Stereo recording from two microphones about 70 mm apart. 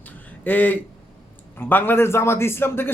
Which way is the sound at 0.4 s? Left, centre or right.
Left.